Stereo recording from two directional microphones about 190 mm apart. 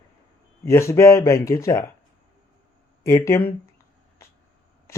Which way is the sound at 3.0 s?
15° left (ahead or behind).